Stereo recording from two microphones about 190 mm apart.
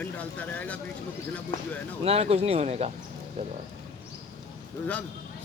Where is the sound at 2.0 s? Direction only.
30° right (ahead or behind).